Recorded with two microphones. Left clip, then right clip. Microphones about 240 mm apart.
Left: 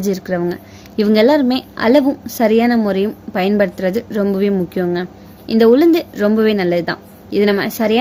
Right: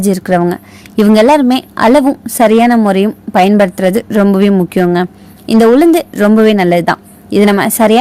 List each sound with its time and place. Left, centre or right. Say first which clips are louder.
0.0 s a woman's voice: right 7 dB; right